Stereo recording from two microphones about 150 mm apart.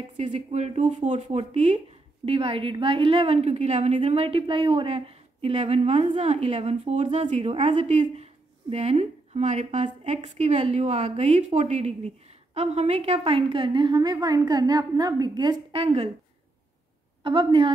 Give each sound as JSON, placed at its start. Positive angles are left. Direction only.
{"t": 0.2, "sound": "a woman's voice", "side_deg": -50}
{"t": 17.2, "sound": "a woman's voice", "side_deg": -35}